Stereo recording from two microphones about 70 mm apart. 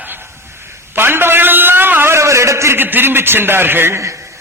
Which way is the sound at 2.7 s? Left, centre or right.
Right.